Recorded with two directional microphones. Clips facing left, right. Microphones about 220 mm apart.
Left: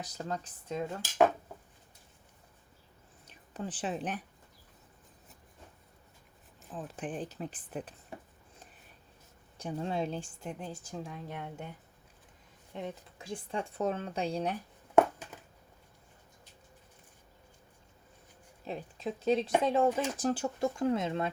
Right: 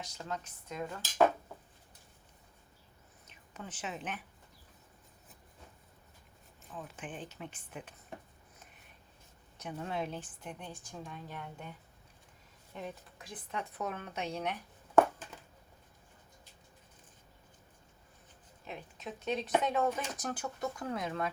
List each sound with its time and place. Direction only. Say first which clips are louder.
0.0 s speech: left 3 dB; 35° left (ahead or behind)
3.2 s speech: left 8 dB; 35° left (ahead or behind)
6.7 s speech: left 6 dB; 35° left (ahead or behind)
9.6 s speech: left 4 dB; 30° left (ahead or behind)
12.7 s speech: left 3 dB; 25° left (ahead or behind)
18.6 s speech: left 7 dB; 35° left (ahead or behind)